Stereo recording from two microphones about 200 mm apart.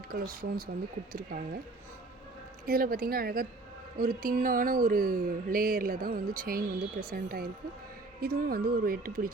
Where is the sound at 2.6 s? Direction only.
45° right (ahead or behind).